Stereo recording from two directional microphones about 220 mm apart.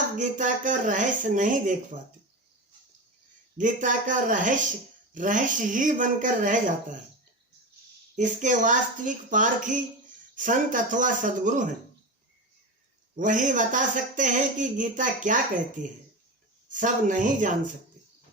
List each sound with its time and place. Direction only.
0.2 s speech: 35° right (ahead or behind)
3.6 s speech: 35° right (ahead or behind)
8.1 s speech: 35° right (ahead or behind)
13.1 s speech: 35° right (ahead or behind)